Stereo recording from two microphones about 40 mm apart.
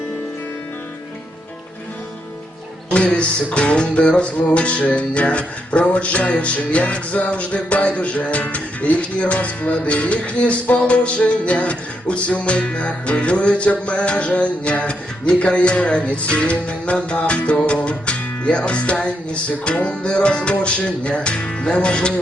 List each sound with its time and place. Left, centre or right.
2.9 s music: left